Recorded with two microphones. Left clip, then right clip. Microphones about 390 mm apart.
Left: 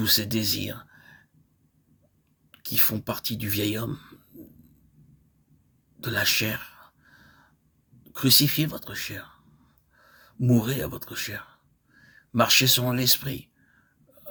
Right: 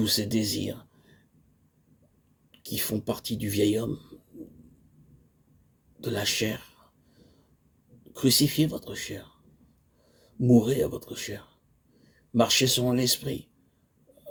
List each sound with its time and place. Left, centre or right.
0.0 s speech: left
2.5 s speech: left
6.0 s speech: left
8.1 s speech: left